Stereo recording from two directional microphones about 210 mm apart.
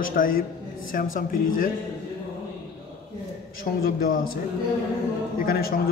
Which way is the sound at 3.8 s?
45° left (ahead or behind).